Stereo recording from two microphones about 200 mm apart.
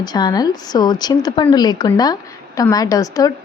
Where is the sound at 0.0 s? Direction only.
20° left (ahead or behind).